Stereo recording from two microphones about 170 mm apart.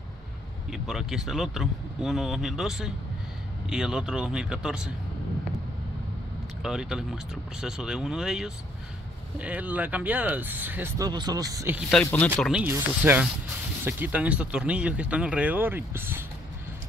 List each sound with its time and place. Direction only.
0.7 s speech: centre (ahead or behind)
6.6 s speech: 5° right (ahead or behind)
11.1 s speech: 25° right (ahead or behind)
11.9 s speech: 10° left (ahead or behind)
12.4 s speech: centre (ahead or behind)
12.6 s speech: 10° right (ahead or behind)